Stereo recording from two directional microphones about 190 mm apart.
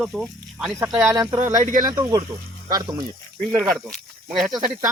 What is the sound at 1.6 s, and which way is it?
Speech, 45° right (ahead or behind).